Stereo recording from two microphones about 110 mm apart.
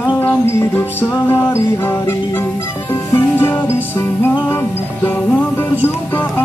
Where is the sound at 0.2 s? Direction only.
20° left (ahead or behind).